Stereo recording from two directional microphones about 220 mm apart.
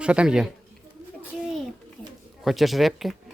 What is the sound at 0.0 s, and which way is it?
Speech, 5° right (ahead or behind).